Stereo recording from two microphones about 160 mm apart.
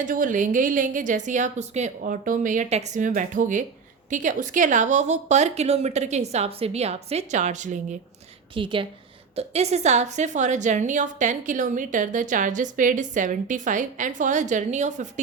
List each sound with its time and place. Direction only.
0.0 s a woman's voice: 55° right (ahead or behind)
8.5 s a woman's voice: 30° right (ahead or behind); by 15.2 s 50° right (ahead or behind)